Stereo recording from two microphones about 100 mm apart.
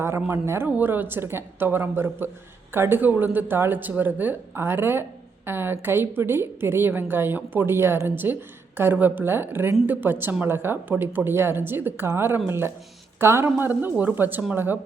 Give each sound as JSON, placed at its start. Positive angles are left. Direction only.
{"t": 0.3, "sound": "a woman's voice", "side_deg": -25}